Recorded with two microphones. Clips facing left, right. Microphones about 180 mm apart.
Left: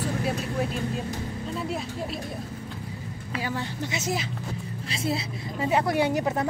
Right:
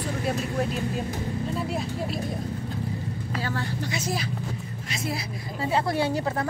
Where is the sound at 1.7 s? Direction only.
Centre (ahead or behind).